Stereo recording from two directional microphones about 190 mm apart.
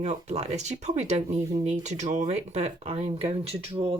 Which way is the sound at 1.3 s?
20° right (ahead or behind).